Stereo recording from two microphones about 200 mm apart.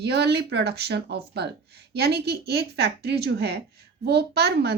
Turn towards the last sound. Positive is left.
turn(degrees=-55)  # may be behind; listen again after turning